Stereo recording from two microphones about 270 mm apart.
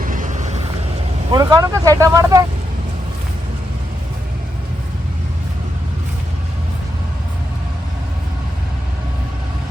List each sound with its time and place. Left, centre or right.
0.0 s vehicle: right
1.3 s speech: centre